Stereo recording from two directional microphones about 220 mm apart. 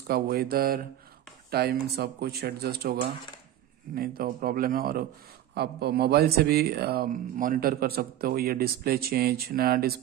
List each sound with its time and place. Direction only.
0.0 s speech: 45° right (ahead or behind)